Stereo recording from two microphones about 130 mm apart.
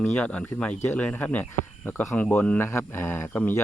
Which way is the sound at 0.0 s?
10° left (ahead or behind).